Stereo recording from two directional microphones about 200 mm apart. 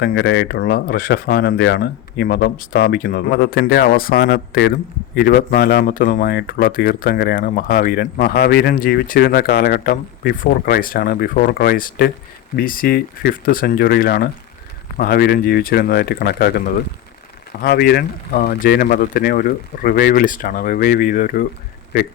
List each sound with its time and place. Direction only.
0.0 s speech: 55° left (ahead or behind)